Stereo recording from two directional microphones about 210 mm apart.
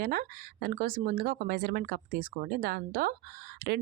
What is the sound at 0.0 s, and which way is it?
Speech, 45° right (ahead or behind).